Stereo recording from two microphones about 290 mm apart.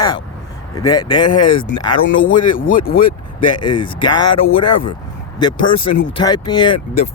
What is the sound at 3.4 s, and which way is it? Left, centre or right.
Speech, centre.